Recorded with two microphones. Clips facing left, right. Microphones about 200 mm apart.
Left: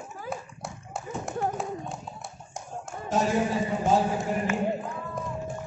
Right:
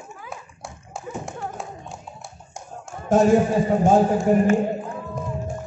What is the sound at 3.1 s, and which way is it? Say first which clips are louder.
Speech: right 9 dB; 50° right (ahead or behind).